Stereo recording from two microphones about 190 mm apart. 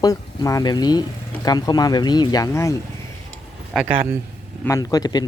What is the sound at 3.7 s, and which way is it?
Speech, centre (ahead or behind).